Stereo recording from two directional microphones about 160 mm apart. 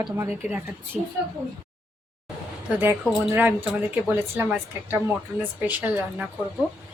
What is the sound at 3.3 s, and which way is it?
A woman's voice, 10° right (ahead or behind).